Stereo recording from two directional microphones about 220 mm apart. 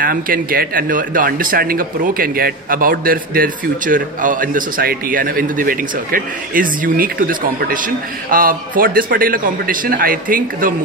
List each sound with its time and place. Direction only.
0.0 s speech: 40° right (ahead or behind)